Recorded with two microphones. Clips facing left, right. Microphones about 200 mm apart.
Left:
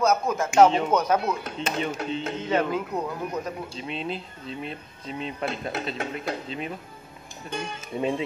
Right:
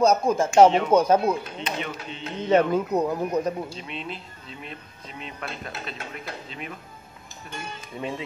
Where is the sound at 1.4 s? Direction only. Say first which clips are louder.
Left 3 dB; 45° left (ahead or behind).